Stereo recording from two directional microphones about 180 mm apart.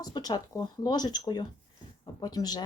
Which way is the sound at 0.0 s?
20° left (ahead or behind).